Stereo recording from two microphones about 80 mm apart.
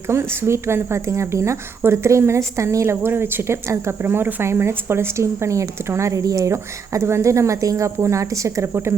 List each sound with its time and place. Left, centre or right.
0.1 s a woman's voice: right
8.6 s a woman's voice: right